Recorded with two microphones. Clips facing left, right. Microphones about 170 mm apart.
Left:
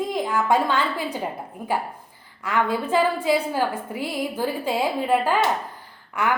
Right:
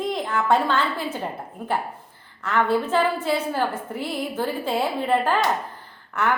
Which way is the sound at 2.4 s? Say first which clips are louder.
Right 2 dB; 10° left (ahead or behind).